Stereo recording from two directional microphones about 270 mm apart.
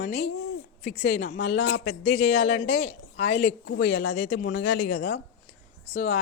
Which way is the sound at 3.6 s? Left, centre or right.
Left.